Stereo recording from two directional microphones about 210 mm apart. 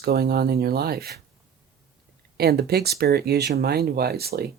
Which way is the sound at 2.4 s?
50° right (ahead or behind).